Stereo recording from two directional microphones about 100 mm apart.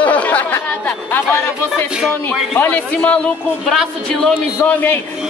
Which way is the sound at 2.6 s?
15° left (ahead or behind).